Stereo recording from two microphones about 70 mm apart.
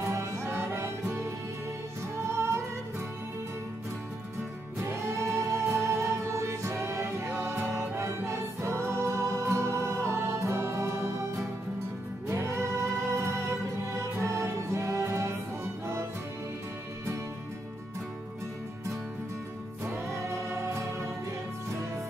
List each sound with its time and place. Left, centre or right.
0.0 s music: right
2.1 s music: right
4.8 s music: right
12.3 s music: right
19.8 s music: right